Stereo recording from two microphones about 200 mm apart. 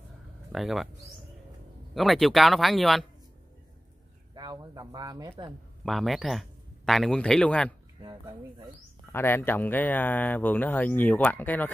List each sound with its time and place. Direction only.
0.5 s speech: centre (ahead or behind)
4.4 s speech: 20° right (ahead or behind)
5.9 s speech: centre (ahead or behind)
8.0 s speech: 25° right (ahead or behind)
9.1 s speech: 10° left (ahead or behind)